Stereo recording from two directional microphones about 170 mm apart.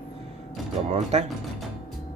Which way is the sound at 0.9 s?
40° right (ahead or behind).